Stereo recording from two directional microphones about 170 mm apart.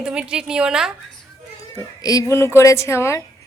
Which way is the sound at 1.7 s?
20° left (ahead or behind).